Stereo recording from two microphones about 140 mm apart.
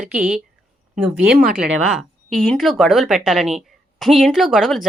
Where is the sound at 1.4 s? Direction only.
90° right.